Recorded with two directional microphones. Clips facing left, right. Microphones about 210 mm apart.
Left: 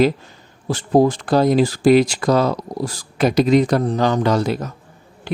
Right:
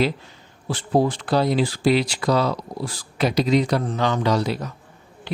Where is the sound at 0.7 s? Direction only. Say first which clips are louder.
Left 5 dB; 45° left (ahead or behind).